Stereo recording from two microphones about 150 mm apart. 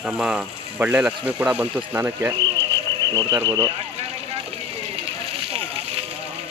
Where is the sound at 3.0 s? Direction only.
30° right (ahead or behind).